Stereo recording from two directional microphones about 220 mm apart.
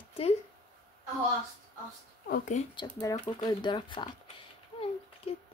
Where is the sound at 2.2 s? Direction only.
40° left (ahead or behind).